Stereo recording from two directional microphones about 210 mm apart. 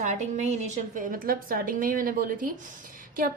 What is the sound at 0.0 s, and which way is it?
A woman's voice, 35° right (ahead or behind).